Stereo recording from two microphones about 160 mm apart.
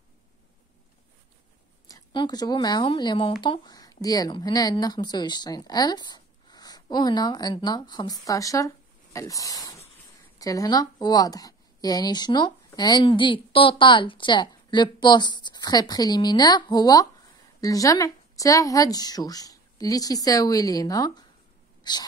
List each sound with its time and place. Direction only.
1.9 s speech: 25° left (ahead or behind)
21.8 s sneeze: 25° left (ahead or behind)